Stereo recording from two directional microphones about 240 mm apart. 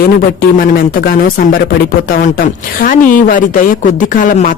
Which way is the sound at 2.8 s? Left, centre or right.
Left.